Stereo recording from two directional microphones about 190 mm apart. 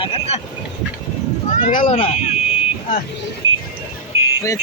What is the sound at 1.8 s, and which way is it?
Speech, 30° left (ahead or behind).